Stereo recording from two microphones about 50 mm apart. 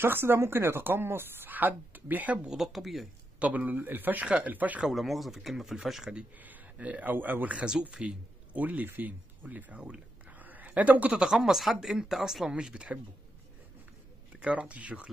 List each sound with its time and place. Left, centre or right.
0.0 s speech: right
2.5 s speech: centre
3.3 s speech: right
4.8 s speech: centre
6.3 s a man's voice: right
7.5 s speech: centre
8.5 s speech: right
10.3 s a sound: right
11.2 s speech: centre
14.3 s speech: right